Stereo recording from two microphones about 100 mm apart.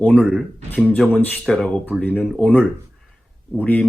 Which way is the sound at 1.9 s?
15° left (ahead or behind).